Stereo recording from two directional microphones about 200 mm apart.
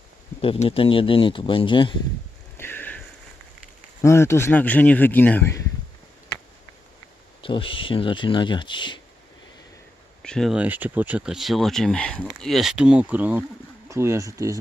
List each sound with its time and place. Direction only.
0.4 s speech: 30° left (ahead or behind)
2.6 s a sound: 10° left (ahead or behind)
4.0 s speech: 15° left (ahead or behind)
7.4 s speech: 25° left (ahead or behind)
10.2 s speech: centre (ahead or behind); by 14.6 s 15° right (ahead or behind)